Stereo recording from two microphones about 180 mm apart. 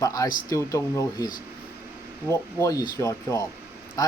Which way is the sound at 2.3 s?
15° left (ahead or behind).